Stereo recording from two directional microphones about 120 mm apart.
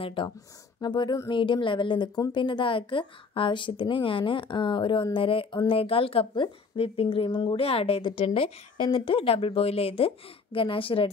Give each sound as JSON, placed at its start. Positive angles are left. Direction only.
{"t": 0.0, "sound": "speech", "side_deg": 45}